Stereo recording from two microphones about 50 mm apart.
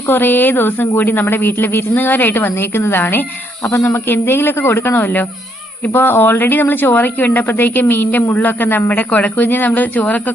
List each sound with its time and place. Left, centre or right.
0.1 s speech: left